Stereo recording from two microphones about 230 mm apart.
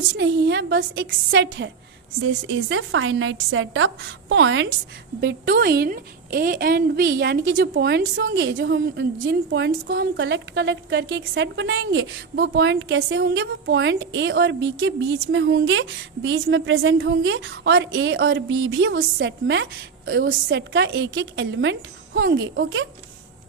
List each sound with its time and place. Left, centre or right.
0.2 s a woman's voice: right